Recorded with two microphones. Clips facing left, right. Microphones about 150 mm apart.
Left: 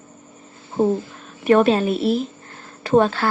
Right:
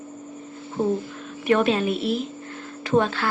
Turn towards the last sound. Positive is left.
turn(degrees=40)  # may be behind; listen again after turning